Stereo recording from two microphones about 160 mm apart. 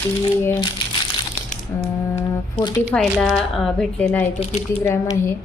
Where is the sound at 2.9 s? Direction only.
5° left (ahead or behind).